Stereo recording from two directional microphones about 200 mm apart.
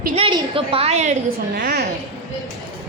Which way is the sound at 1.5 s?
50° right (ahead or behind).